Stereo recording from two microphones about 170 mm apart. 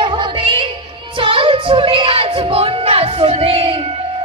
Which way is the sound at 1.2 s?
30° right (ahead or behind).